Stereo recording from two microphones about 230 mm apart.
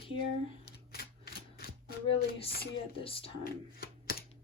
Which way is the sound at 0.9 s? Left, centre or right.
Left.